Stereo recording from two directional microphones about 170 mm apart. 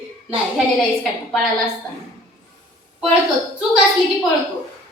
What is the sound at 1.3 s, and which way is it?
Speech, centre (ahead or behind).